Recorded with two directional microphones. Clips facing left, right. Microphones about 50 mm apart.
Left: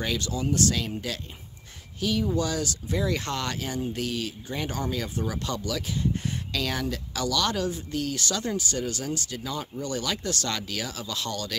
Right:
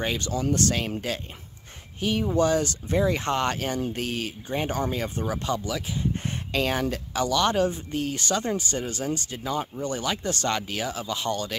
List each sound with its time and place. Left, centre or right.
0.0 s speech: right
0.3 s speech: right
3.5 s speech: right
6.2 s speech: right